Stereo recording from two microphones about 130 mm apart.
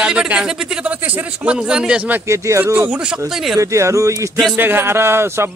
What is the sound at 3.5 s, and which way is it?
A man's voice, 25° right (ahead or behind).